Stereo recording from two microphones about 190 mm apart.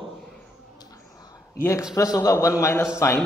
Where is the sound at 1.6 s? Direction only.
15° left (ahead or behind).